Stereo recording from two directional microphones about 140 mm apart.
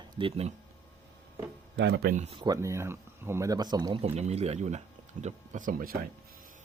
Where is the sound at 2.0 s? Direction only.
90° right.